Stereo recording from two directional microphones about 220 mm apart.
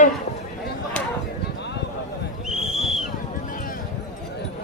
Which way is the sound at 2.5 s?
Centre (ahead or behind).